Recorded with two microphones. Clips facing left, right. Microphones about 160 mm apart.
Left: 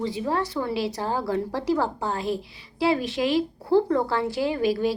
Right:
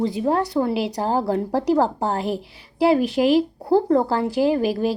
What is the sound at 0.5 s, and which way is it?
A woman's voice, 40° right (ahead or behind).